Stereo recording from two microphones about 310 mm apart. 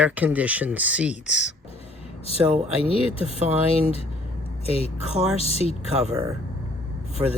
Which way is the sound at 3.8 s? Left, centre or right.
Centre.